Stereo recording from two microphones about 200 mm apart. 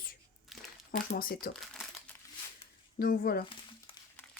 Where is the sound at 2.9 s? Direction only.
45° left (ahead or behind).